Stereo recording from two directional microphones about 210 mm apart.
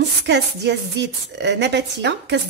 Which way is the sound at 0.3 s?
55° right (ahead or behind).